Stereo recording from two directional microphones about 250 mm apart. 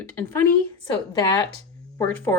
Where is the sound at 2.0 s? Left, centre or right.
Centre.